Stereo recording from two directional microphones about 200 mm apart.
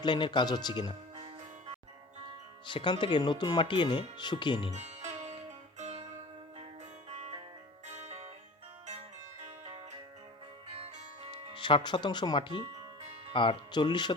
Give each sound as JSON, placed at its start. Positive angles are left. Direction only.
{"t": 0.0, "sound": "speech", "side_deg": 20}
{"t": 1.1, "sound": "music", "side_deg": -30}
{"t": 2.6, "sound": "speech", "side_deg": 25}
{"t": 4.7, "sound": "music", "side_deg": -35}
{"t": 9.4, "sound": "music", "side_deg": -30}
{"t": 11.5, "sound": "speech", "side_deg": 25}
{"t": 13.0, "sound": "music", "side_deg": -30}
{"t": 13.3, "sound": "speech", "side_deg": 25}